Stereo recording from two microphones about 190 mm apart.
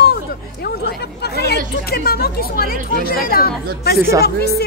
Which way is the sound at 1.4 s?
55° left (ahead or behind).